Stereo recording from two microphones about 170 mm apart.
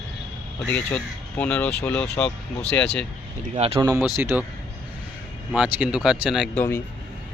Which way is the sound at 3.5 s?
35° right (ahead or behind).